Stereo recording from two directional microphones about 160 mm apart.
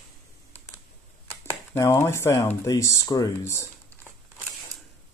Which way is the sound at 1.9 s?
15° left (ahead or behind).